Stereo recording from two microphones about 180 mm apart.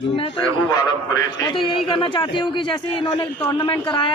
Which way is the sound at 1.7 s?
30° left (ahead or behind).